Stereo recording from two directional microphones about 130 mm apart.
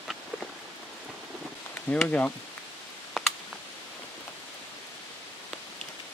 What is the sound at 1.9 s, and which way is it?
Speech, 10° left (ahead or behind).